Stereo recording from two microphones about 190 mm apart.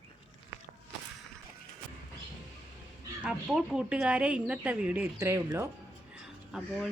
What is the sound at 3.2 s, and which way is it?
A woman's voice, 5° right (ahead or behind).